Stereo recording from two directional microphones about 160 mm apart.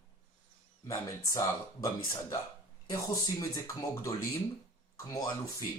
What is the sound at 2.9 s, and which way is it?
Speech, 20° left (ahead or behind).